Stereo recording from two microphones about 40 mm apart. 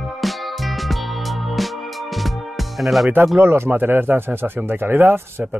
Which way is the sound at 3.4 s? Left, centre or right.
Right.